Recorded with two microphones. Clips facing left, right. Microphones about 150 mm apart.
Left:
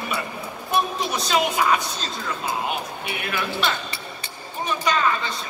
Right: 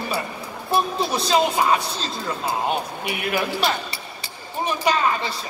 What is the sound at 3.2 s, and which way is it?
A woman's voice, 30° right (ahead or behind).